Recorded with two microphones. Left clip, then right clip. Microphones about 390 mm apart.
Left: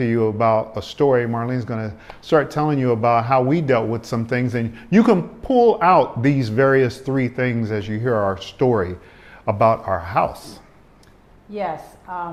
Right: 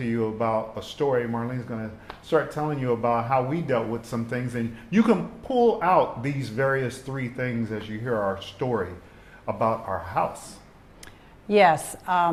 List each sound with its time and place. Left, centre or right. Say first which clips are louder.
0.0 s speech: left 8 dB; left
11.5 s a woman's voice: right 8 dB; right